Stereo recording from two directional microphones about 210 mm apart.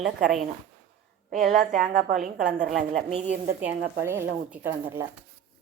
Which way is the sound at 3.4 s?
10° right (ahead or behind).